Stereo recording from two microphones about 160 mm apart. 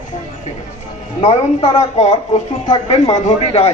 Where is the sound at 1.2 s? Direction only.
40° left (ahead or behind).